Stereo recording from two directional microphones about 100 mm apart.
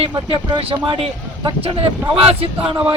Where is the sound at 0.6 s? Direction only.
55° right (ahead or behind).